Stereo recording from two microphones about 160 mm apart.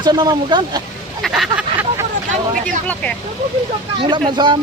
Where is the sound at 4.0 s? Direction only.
30° right (ahead or behind).